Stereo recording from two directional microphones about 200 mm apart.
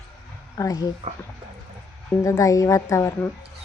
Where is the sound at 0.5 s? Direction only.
15° left (ahead or behind).